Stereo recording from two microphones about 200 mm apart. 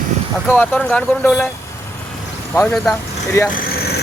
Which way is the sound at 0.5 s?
10° left (ahead or behind).